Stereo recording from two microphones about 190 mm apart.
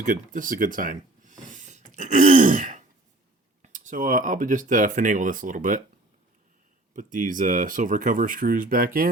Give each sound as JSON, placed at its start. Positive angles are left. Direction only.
{"t": 0.0, "sound": "speech", "side_deg": -45}
{"t": 6.9, "sound": "speech", "side_deg": -45}